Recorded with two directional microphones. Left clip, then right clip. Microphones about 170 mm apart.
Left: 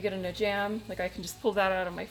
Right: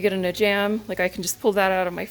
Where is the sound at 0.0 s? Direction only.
60° right (ahead or behind).